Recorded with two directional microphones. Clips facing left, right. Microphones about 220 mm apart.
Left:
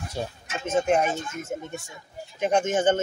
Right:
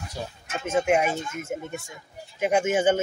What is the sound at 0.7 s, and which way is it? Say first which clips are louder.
Speech: even; 10° right (ahead or behind).